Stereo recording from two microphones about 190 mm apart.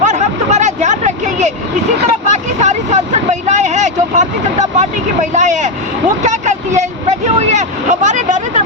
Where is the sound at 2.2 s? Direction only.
40° right (ahead or behind).